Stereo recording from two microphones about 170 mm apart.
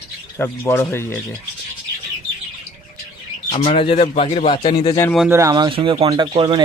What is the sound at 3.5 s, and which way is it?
Speech, 25° left (ahead or behind).